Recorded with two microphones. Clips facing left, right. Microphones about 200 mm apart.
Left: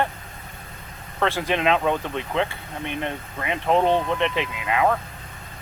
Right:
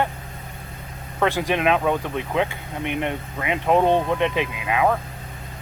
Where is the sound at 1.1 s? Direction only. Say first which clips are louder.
Right 2 dB; 15° right (ahead or behind).